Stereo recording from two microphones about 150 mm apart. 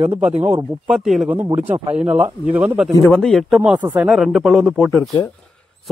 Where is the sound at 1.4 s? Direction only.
15° right (ahead or behind).